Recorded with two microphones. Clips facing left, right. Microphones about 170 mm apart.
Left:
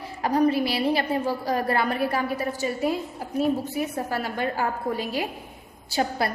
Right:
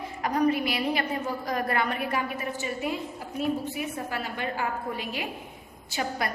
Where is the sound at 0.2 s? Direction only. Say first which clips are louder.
Left 3 dB; 30° left (ahead or behind).